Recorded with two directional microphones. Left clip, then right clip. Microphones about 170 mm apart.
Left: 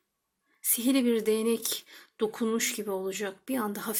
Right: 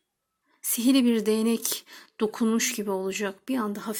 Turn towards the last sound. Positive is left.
turn(degrees=-10)  # may be behind; listen again after turning